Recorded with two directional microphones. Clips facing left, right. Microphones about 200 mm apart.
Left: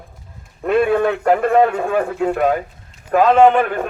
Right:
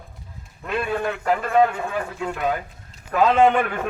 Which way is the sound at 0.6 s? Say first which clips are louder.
Left 10 dB; 60° left (ahead or behind).